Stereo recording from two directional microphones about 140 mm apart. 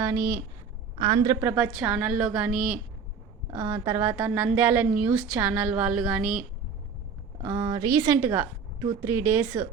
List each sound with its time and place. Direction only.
0.0 s speech: 15° right (ahead or behind)
0.9 s a woman's voice: 35° right (ahead or behind); by 2.7 s 10° right (ahead or behind)
3.5 s a woman's voice: 20° right (ahead or behind)
7.4 s a woman's voice: 25° right (ahead or behind)
8.2 s a woman's voice: 15° right (ahead or behind)